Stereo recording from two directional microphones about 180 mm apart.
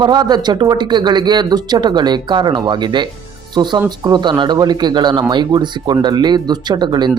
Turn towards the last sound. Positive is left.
turn(degrees=-25)  # may be behind; listen again after turning